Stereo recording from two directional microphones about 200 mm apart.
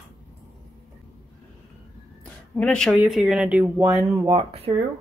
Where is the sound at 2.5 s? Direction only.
5° left (ahead or behind).